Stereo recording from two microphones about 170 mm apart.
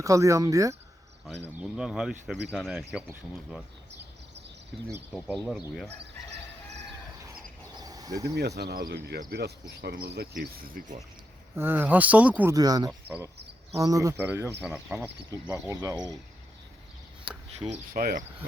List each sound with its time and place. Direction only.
0.0 s speech: 20° right (ahead or behind)
1.5 s speech: 5° right (ahead or behind)
5.3 s speech: centre (ahead or behind)
7.8 s cricket: 20° right (ahead or behind)
8.4 s speech: 75° right (ahead or behind); by 10.9 s 55° right (ahead or behind)
11.5 s speech: 10° right (ahead or behind)
12.5 s speech: 20° right (ahead or behind)
12.9 s speech: 5° right (ahead or behind)
13.7 s speech: 20° right (ahead or behind)
14.6 s speech: 5° right (ahead or behind)
15.3 s speech: 20° right (ahead or behind)
17.9 s speech: 55° right (ahead or behind)